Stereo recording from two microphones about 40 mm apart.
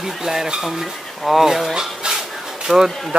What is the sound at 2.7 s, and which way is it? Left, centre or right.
Speech, centre.